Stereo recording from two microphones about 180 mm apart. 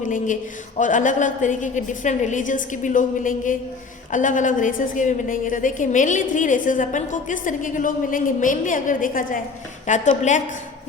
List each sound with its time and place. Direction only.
0.0 s a woman's voice: 45° left (ahead or behind)